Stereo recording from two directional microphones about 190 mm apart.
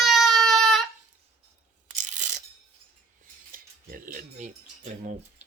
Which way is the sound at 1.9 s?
40° right (ahead or behind).